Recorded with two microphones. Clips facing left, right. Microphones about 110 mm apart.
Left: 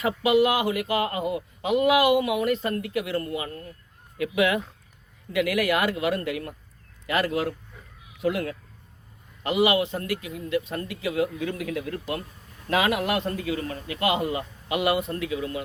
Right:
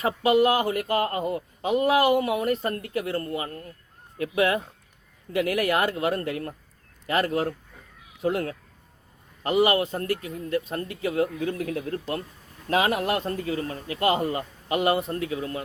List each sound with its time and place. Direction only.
0.0 s speech: 35° right (ahead or behind)